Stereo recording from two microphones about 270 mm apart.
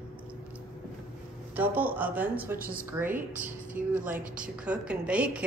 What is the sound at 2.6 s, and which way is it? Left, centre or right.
Speech, right.